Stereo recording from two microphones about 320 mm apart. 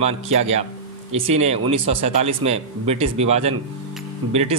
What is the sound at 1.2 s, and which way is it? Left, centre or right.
A man's voice, centre.